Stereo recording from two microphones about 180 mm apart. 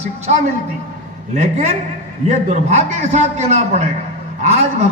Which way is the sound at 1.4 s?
40° right (ahead or behind).